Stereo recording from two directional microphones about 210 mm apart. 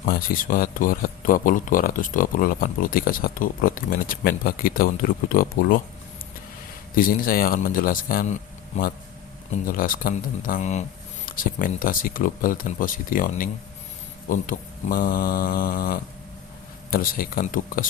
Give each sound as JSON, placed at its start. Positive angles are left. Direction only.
{"t": 0.0, "sound": "speech", "side_deg": 45}
{"t": 6.9, "sound": "a man's voice", "side_deg": 45}